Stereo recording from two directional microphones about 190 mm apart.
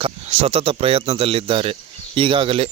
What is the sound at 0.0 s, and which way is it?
Speech, 35° right (ahead or behind).